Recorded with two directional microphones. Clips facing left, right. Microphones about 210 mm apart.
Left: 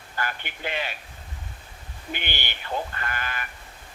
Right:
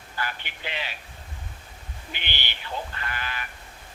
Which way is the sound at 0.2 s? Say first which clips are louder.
Left 2 dB; 50° left (ahead or behind).